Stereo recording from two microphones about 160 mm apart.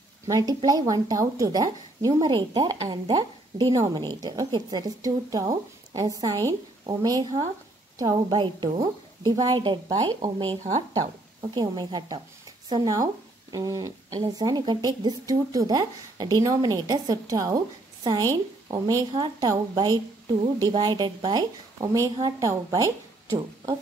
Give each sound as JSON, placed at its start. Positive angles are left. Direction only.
{"t": 0.3, "sound": "speech", "side_deg": -25}